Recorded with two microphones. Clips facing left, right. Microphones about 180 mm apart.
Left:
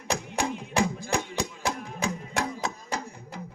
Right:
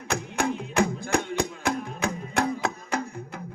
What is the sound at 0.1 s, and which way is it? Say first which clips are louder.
Music: right 2 dB; 60° right (ahead or behind).